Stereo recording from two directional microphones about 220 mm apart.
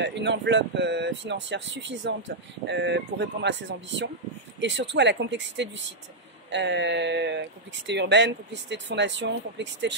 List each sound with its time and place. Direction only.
0.0 s speech: 55° right (ahead or behind)